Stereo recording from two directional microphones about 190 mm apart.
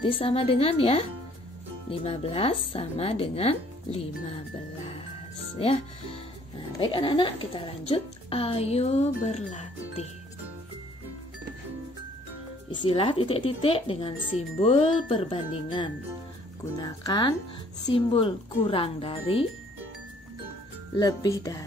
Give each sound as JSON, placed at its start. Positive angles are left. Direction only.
{"t": 0.0, "sound": "speech", "side_deg": 30}
{"t": 6.8, "sound": "speech", "side_deg": 25}
{"t": 12.8, "sound": "speech", "side_deg": 30}
{"t": 20.9, "sound": "speech", "side_deg": 20}